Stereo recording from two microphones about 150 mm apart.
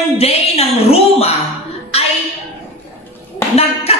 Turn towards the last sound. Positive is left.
turn(degrees=40)  # may be behind; listen again after turning